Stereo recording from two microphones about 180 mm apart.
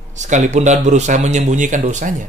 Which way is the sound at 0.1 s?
40° right (ahead or behind).